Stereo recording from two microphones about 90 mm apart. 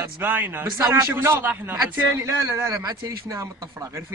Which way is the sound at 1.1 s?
25° right (ahead or behind).